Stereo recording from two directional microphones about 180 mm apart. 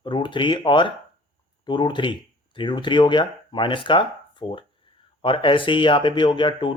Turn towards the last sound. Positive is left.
turn(degrees=25)  # may be behind; listen again after turning